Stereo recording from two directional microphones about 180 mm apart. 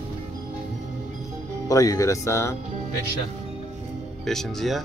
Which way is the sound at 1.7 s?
20° left (ahead or behind).